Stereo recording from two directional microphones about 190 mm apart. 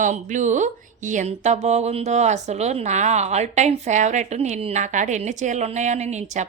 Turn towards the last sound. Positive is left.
turn(degrees=-40)  # may be behind; listen again after turning